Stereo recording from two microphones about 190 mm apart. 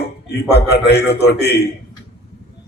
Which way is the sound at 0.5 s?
60° left (ahead or behind).